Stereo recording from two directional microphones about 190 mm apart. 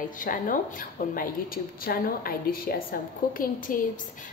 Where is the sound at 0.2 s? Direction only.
45° left (ahead or behind).